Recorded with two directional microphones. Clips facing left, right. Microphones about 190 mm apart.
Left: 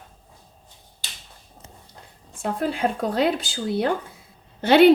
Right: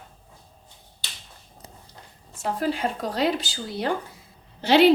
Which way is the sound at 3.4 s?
55° left (ahead or behind).